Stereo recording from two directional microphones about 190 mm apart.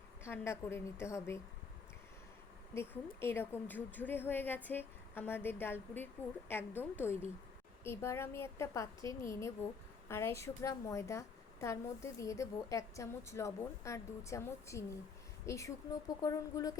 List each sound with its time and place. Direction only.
0.3 s a woman's voice: 15° left (ahead or behind)
2.7 s a woman's voice: 10° left (ahead or behind)